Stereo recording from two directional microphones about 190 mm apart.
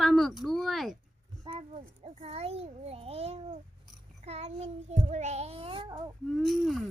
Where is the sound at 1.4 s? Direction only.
30° right (ahead or behind).